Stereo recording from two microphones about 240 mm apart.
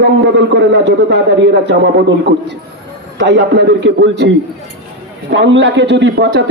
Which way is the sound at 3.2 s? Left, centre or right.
Right.